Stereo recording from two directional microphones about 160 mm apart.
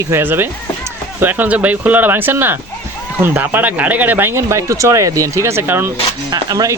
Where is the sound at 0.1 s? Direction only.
15° right (ahead or behind).